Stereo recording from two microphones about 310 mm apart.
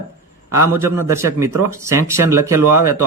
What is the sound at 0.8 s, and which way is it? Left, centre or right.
Speech, centre.